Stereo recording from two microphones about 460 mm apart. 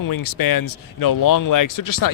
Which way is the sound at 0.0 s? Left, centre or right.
Left.